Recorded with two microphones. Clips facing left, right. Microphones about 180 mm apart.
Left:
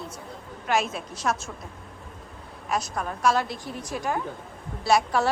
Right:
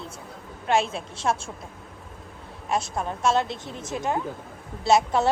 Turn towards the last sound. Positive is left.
turn(degrees=-20)  # may be behind; listen again after turning